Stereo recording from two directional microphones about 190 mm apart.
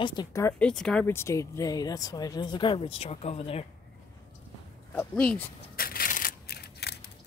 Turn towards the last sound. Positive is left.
turn(degrees=60)  # may be behind; listen again after turning